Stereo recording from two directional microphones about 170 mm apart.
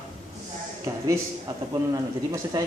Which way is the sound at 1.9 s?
20° right (ahead or behind).